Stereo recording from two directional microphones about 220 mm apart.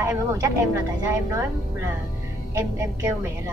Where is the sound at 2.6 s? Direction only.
10° right (ahead or behind).